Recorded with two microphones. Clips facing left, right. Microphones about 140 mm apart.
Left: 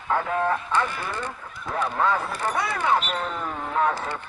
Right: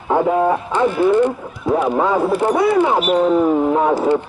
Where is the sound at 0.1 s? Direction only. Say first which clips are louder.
Right 9 dB; 15° right (ahead or behind).